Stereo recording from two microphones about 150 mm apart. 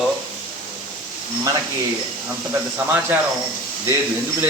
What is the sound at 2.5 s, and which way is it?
Speech, 15° right (ahead or behind).